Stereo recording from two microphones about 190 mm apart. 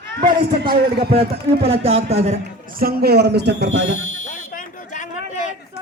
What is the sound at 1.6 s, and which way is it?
A man's voice, 30° right (ahead or behind).